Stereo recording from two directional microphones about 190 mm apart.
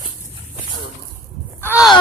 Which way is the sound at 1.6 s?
10° left (ahead or behind).